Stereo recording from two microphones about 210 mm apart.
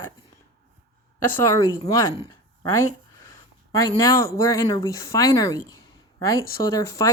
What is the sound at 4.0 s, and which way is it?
Speech, 15° left (ahead or behind).